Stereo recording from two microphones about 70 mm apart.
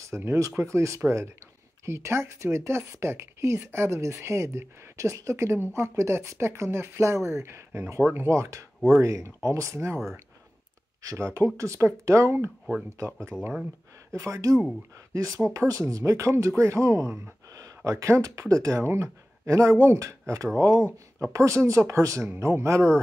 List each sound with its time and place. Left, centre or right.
0.0 s speech: right
11.3 s speech: right
14.1 s speech: right